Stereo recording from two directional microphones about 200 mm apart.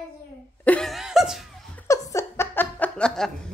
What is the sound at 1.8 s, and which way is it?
Laughter, 15° left (ahead or behind).